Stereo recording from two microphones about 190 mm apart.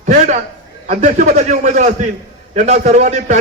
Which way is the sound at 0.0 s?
40° right (ahead or behind).